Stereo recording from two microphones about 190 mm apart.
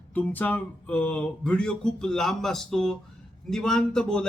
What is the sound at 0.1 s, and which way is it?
Speech, 10° left (ahead or behind).